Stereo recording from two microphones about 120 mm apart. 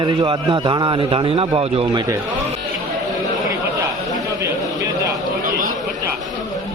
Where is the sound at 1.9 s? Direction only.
35° right (ahead or behind).